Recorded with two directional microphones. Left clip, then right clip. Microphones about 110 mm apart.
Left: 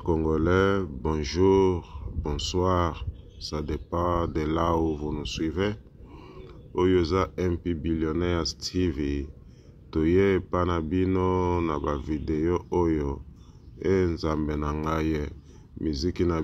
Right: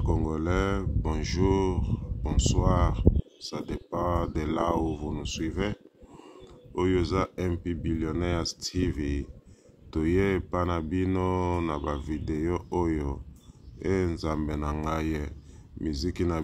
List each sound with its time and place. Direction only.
0.0 s speech: 20° left (ahead or behind)